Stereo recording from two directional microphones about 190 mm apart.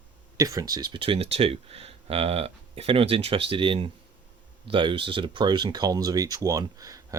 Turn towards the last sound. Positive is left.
turn(degrees=-20)  # may be behind; listen again after turning